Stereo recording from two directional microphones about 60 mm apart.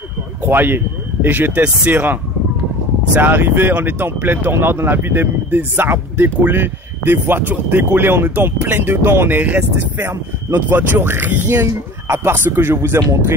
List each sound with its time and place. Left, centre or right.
0.5 s speech: right
3.2 s speech: right
8.6 s speech: right
9.4 s speech: right
11.5 s speech: right